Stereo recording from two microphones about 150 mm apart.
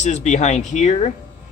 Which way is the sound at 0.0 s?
50° left (ahead or behind).